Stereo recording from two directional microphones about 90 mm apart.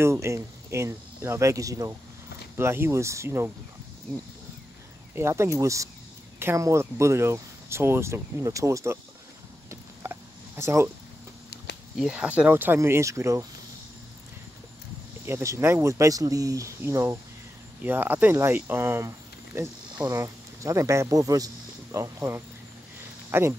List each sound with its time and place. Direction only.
0.0 s speech: 30° right (ahead or behind)
2.5 s speech: 30° right (ahead or behind)
5.1 s speech: 30° right (ahead or behind)
9.7 s a sound: 30° right (ahead or behind)
12.1 s speech: 10° right (ahead or behind); by 13.5 s 35° right (ahead or behind)
15.2 s speech: 30° right (ahead or behind)